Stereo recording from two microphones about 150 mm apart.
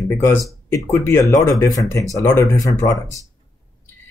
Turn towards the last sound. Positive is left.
turn(degrees=25)  # may be behind; listen again after turning